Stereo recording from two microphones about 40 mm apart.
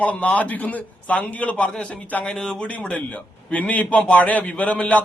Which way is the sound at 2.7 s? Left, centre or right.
Left.